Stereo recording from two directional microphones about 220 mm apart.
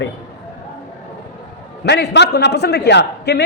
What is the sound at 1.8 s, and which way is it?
A man's voice, 50° left (ahead or behind).